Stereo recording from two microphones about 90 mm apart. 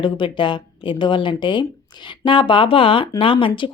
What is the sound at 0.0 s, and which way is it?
A woman's voice, 65° left (ahead or behind).